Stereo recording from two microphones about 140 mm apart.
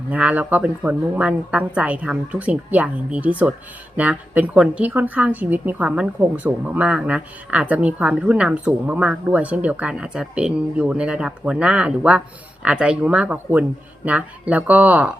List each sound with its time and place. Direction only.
0.1 s a woman's voice: 10° right (ahead or behind)